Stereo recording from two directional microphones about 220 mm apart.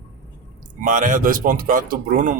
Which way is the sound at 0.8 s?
35° right (ahead or behind).